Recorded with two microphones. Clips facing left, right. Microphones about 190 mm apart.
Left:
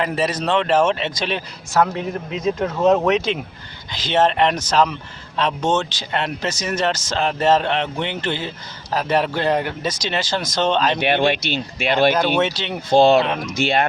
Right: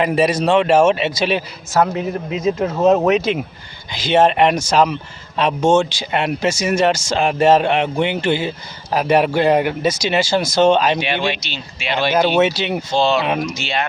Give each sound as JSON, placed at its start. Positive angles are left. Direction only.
{"t": 0.0, "sound": "speech", "side_deg": -15}
{"t": 11.0, "sound": "speech", "side_deg": 55}
{"t": 12.1, "sound": "speech", "side_deg": -10}
{"t": 12.9, "sound": "speech", "side_deg": 55}